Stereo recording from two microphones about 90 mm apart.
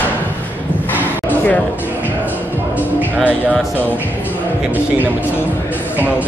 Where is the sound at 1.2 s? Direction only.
20° left (ahead or behind).